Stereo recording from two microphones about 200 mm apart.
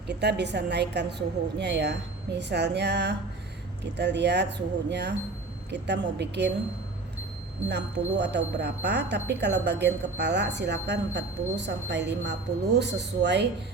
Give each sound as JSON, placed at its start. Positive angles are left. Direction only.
{"t": 0.1, "sound": "speech", "side_deg": -55}
{"t": 7.7, "sound": "speech", "side_deg": -60}